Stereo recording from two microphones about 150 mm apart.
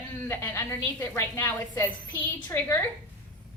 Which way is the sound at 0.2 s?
15° left (ahead or behind).